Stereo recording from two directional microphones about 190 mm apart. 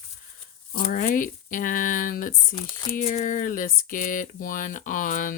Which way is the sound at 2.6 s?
25° left (ahead or behind).